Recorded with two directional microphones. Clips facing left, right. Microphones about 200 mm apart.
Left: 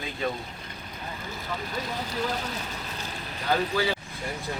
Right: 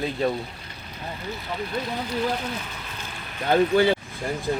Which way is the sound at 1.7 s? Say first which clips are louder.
Right 6 dB; 40° left (ahead or behind).